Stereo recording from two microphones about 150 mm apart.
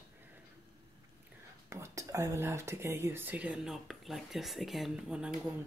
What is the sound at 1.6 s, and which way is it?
Speech, 20° right (ahead or behind).